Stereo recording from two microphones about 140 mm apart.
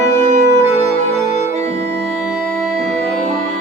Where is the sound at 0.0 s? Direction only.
55° right (ahead or behind).